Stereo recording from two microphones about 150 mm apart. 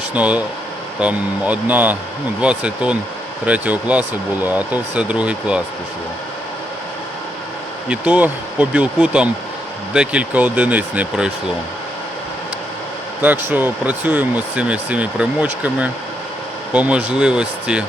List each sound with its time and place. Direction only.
0.1 s speech: 10° right (ahead or behind)
7.9 s speech: 10° right (ahead or behind)
13.2 s speech: 10° right (ahead or behind)